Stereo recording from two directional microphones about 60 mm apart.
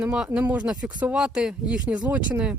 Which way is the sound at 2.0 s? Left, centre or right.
Right.